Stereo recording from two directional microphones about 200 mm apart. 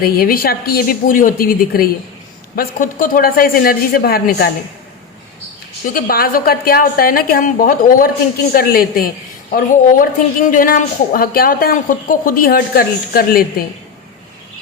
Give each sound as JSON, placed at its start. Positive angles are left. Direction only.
{"t": 0.0, "sound": "a woman's voice", "side_deg": 45}
{"t": 5.9, "sound": "a woman's voice", "side_deg": 45}